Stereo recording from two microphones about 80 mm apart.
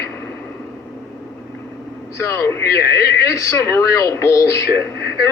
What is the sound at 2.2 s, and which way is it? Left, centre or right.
A man's voice, left.